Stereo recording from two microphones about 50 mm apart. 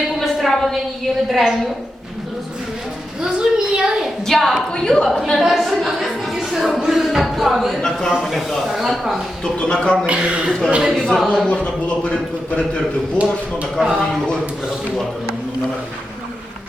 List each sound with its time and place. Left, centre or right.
0.2 s a sound: centre
1.3 s speech: centre
3.2 s a sound: centre
4.3 s speech: centre
4.7 s speech: centre
5.4 s a woman's voice: centre
6.7 s a sound: centre
8.3 s speech: centre
9.4 s speech: centre
10.1 s speech: right
11.0 s speech: centre
11.3 s speech: left
13.2 s speech: right
13.8 s speech: centre